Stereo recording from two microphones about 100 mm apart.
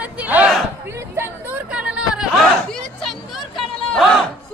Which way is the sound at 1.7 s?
10° right (ahead or behind).